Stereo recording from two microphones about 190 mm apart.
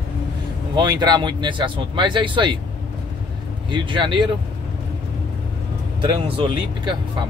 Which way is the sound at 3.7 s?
25° right (ahead or behind).